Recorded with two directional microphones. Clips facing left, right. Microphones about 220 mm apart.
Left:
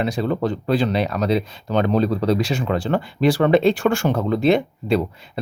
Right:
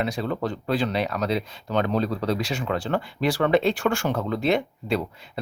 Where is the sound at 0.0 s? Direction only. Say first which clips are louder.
Left 5 dB; 30° left (ahead or behind).